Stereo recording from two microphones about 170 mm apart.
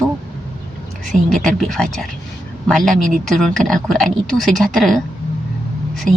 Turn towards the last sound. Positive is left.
turn(degrees=0)  # may be behind; listen again after turning